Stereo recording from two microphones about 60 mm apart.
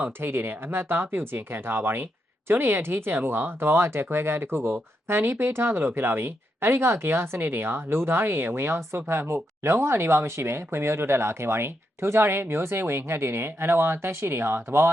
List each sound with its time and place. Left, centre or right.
0.2 s speech: right